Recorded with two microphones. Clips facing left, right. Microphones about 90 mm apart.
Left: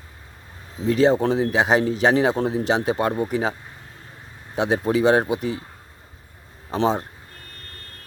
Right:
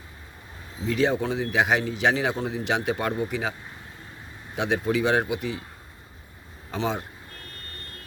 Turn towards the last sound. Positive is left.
turn(degrees=35)  # may be behind; listen again after turning